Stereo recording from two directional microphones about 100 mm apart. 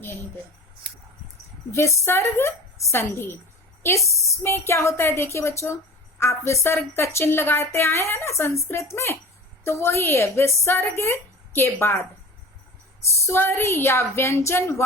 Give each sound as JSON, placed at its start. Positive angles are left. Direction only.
{"t": 1.7, "sound": "a woman's voice", "side_deg": 25}
{"t": 13.1, "sound": "a woman's voice", "side_deg": 25}